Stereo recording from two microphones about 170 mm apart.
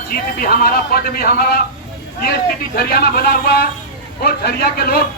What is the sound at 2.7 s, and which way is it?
A man's voice, 65° left (ahead or behind).